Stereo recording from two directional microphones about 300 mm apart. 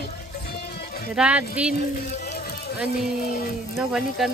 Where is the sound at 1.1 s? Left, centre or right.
Centre.